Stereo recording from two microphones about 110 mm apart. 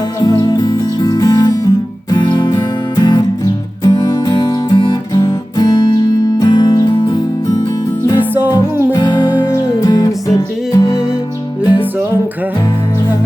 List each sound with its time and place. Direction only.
0.2 s music: 35° left (ahead or behind)
8.2 s music: 20° right (ahead or behind)
8.9 s music: 40° left (ahead or behind)
11.6 s music: 15° right (ahead or behind)